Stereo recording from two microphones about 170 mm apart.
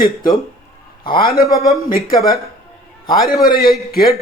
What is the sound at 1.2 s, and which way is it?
Speech, 60° left (ahead or behind).